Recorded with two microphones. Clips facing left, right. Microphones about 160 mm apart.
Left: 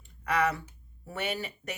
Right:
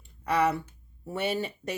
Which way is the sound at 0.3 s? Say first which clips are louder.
Right 3 dB; 30° right (ahead or behind).